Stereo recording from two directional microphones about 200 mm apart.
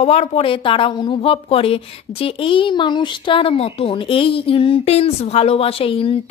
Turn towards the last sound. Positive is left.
turn(degrees=30)  # may be behind; listen again after turning